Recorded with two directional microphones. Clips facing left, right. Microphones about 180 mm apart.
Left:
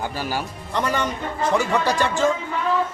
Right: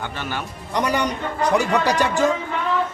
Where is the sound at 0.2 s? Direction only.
35° left (ahead or behind).